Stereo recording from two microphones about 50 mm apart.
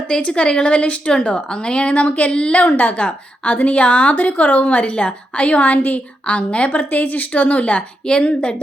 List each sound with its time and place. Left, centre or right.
0.1 s a woman's voice: centre